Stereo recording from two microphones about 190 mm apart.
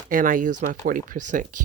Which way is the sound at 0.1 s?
45° right (ahead or behind).